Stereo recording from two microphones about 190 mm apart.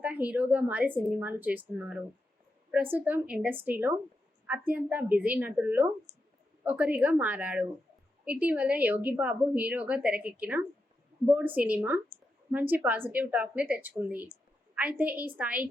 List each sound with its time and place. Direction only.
0.0 s a woman's voice: 10° right (ahead or behind)